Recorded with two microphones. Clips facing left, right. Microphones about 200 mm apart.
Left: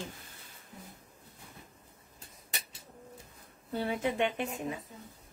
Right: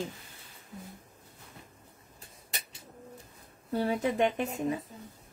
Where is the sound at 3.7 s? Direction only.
40° right (ahead or behind).